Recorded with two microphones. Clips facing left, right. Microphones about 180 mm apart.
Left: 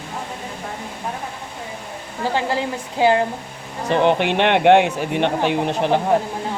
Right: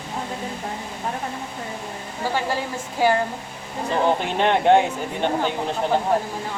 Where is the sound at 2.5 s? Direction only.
20° left (ahead or behind).